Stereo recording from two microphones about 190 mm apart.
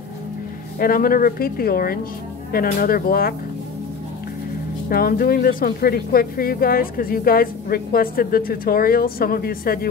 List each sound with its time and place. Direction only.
0.7 s speech: 50° left (ahead or behind)
4.8 s speech: 50° left (ahead or behind)